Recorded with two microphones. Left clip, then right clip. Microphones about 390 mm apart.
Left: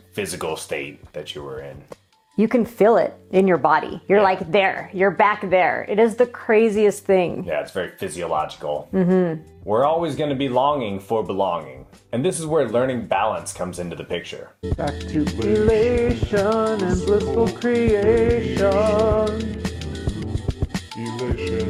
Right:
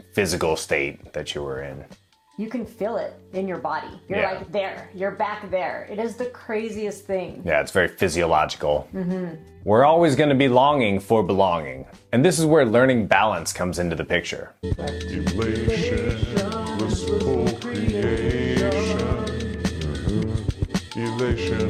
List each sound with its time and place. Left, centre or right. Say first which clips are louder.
0.2 s speech: right 4 dB; right
2.5 s a woman's voice: left 11 dB; left
7.4 s speech: right 5 dB; right
14.6 s music: left 8 dB; centre